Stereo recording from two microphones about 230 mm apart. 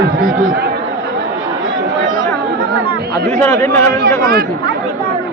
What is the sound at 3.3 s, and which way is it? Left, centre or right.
Speech, centre.